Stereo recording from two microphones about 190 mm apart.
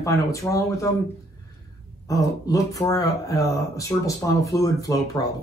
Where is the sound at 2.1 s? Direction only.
15° left (ahead or behind).